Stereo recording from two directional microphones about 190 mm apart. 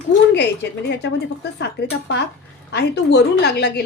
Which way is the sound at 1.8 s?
60° left (ahead or behind).